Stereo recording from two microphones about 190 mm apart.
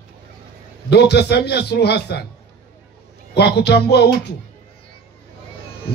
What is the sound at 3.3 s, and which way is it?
A man's voice, 60° left (ahead or behind).